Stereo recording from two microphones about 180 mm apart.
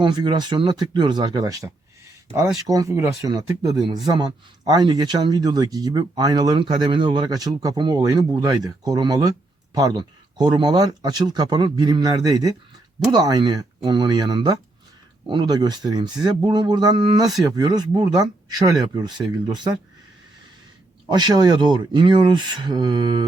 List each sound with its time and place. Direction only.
0.0 s speech: 25° right (ahead or behind)
21.1 s speech: 25° right (ahead or behind)